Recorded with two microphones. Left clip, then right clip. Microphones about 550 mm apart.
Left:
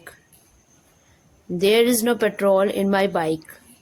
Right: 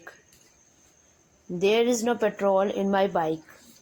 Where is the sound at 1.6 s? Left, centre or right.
Left.